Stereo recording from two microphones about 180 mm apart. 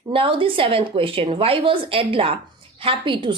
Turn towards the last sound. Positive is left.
turn(degrees=-25)  # may be behind; listen again after turning